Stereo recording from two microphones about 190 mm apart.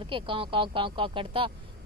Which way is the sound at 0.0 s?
25° right (ahead or behind).